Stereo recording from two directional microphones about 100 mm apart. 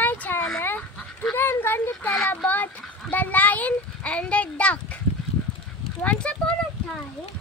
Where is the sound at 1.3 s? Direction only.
25° left (ahead or behind).